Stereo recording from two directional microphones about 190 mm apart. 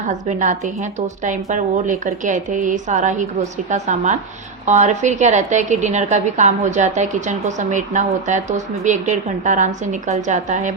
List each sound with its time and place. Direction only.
0.1 s a woman's voice: 40° right (ahead or behind)